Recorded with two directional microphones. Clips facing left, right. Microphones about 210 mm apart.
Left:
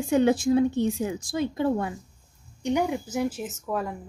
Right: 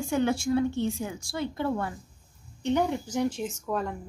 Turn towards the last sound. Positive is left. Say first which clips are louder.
# even
turn(degrees=5)  # may be behind; listen again after turning